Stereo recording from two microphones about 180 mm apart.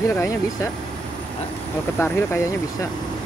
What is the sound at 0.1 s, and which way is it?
Speech, 15° left (ahead or behind).